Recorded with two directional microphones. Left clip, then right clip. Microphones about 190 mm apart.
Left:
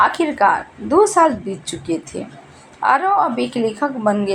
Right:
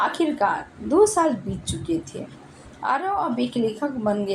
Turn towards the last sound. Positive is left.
turn(degrees=25)  # may be behind; listen again after turning